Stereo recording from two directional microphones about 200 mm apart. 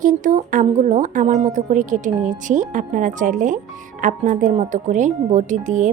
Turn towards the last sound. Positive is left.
turn(degrees=-40)  # may be behind; listen again after turning